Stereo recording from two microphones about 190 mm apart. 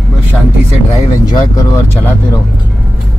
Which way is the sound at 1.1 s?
20° left (ahead or behind).